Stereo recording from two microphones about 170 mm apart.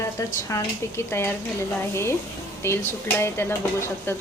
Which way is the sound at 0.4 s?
15° left (ahead or behind).